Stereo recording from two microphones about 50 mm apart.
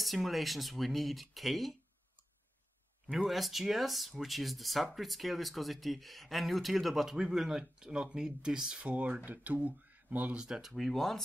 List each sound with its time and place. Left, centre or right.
0.0 s speech: centre
3.2 s speech: centre
8.7 s speech: right
10.3 s speech: centre
10.8 s speech: centre